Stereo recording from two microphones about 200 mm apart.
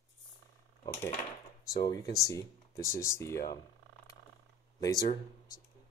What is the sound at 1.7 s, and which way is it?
Speech, 20° left (ahead or behind).